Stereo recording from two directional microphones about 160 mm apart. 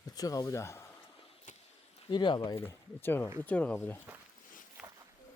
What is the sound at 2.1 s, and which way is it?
Speech, 30° left (ahead or behind).